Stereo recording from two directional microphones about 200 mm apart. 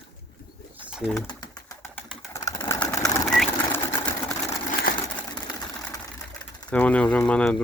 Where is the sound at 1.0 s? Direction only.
10° left (ahead or behind).